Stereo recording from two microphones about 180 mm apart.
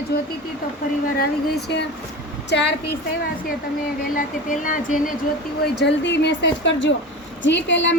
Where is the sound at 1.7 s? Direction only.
70° left (ahead or behind).